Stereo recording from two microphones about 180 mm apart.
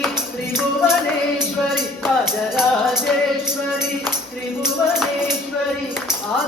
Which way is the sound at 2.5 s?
5° right (ahead or behind).